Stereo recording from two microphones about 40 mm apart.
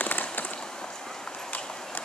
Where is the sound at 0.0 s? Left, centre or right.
Left.